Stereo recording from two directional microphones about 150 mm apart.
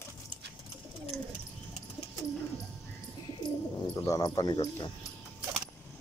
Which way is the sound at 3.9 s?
25° left (ahead or behind).